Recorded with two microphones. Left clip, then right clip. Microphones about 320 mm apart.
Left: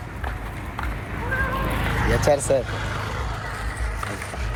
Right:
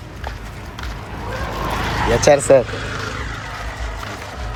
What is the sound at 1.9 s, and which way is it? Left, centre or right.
Speech, right.